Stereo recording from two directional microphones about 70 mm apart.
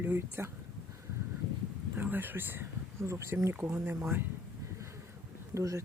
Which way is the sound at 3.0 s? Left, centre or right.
Right.